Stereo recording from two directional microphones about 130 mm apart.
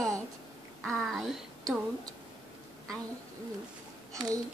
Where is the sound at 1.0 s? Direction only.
5° left (ahead or behind).